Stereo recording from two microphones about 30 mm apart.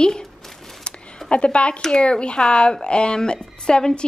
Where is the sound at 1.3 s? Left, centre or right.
Left.